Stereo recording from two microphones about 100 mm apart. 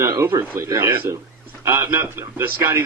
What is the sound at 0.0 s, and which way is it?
A man's voice, 30° right (ahead or behind).